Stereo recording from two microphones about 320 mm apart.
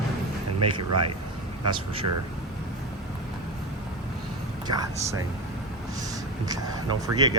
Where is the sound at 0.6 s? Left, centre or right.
Right.